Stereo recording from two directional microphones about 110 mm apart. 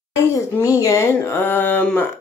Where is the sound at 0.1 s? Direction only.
25° left (ahead or behind).